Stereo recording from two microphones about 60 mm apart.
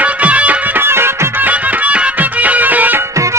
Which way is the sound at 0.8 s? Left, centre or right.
Right.